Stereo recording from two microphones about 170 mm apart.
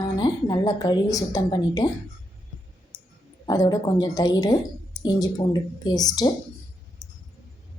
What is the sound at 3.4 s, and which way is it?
A woman's voice, 20° left (ahead or behind).